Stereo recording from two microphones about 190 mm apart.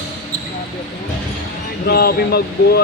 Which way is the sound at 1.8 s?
55° left (ahead or behind).